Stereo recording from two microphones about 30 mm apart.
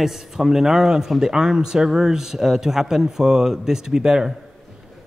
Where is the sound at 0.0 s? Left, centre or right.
Centre.